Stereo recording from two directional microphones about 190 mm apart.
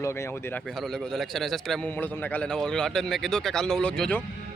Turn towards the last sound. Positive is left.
turn(degrees=5)  # may be behind; listen again after turning